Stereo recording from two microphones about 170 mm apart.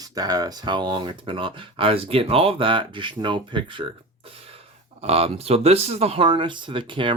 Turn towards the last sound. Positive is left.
turn(degrees=-30)  # may be behind; listen again after turning